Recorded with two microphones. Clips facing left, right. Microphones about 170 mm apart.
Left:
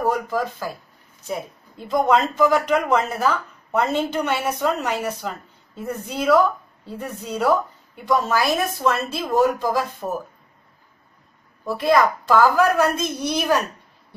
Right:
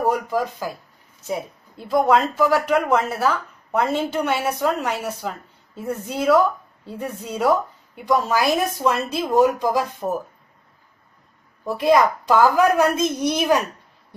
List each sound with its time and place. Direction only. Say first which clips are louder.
0.0 s speech: right 1 dB; 10° right (ahead or behind)
11.8 s speech: right 1 dB; 10° right (ahead or behind)